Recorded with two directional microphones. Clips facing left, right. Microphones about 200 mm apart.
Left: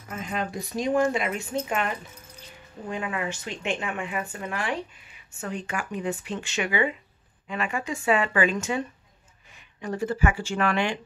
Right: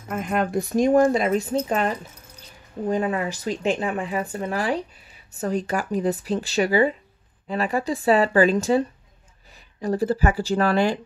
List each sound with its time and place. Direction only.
0.1 s speech: 55° right (ahead or behind); by 11.0 s 35° right (ahead or behind)